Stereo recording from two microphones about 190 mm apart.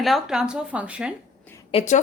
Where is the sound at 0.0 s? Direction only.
Centre (ahead or behind).